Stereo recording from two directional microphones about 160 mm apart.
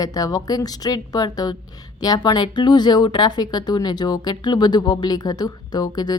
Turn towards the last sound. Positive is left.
turn(degrees=25)  # may be behind; listen again after turning